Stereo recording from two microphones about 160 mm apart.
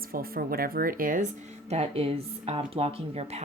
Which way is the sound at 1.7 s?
40° right (ahead or behind).